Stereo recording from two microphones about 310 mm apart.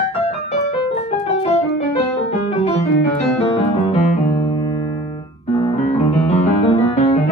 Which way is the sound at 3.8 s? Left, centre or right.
Left.